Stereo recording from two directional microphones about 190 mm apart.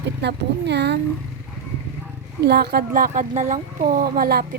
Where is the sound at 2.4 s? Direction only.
60° right (ahead or behind).